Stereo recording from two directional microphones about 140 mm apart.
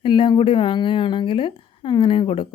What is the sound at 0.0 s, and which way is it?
Speech, 35° left (ahead or behind).